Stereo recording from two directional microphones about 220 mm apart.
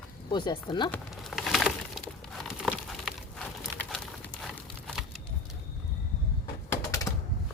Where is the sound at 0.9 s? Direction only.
Centre (ahead or behind).